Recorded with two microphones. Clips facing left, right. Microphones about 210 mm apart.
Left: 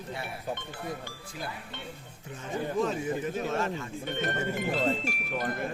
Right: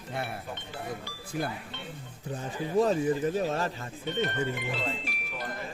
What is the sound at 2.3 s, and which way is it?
Speech, 35° right (ahead or behind).